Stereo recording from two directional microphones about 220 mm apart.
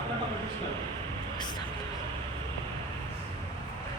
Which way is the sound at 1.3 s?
20° left (ahead or behind).